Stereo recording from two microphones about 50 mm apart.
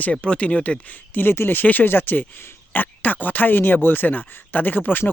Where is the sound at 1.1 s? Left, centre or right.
Left.